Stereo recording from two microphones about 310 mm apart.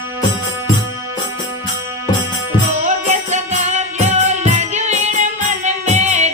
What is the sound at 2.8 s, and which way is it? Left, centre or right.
Music, right.